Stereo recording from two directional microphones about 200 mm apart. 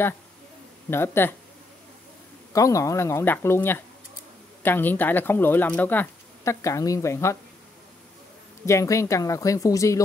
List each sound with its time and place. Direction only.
0.8 s speech: 10° left (ahead or behind)
2.5 s speech: 15° left (ahead or behind)
8.6 s speech: 15° left (ahead or behind)